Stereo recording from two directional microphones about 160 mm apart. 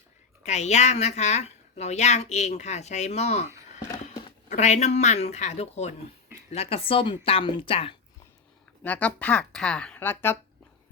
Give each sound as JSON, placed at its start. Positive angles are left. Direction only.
{"t": 0.4, "sound": "a woman's voice", "side_deg": 45}
{"t": 4.4, "sound": "a woman's voice", "side_deg": 45}
{"t": 8.8, "sound": "speech", "side_deg": 10}